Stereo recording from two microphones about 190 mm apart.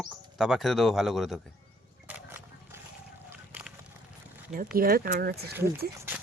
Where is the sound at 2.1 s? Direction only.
10° right (ahead or behind).